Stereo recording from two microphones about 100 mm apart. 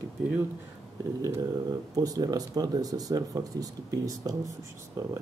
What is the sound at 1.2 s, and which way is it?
Speech, 35° right (ahead or behind).